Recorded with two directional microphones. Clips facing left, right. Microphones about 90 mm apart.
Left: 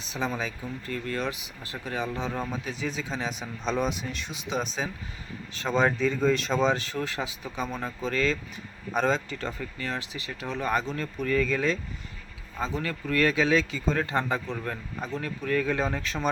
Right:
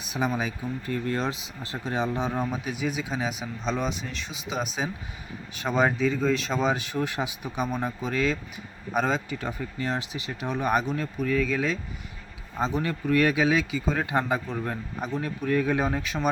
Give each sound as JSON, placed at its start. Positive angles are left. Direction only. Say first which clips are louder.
{"t": 0.0, "sound": "speech", "louder": "right 3 dB", "side_deg": -15}
{"t": 12.5, "sound": "speech", "louder": "right 4 dB", "side_deg": -20}